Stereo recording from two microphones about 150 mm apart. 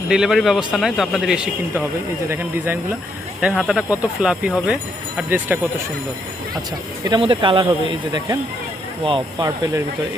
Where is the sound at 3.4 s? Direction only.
5° right (ahead or behind).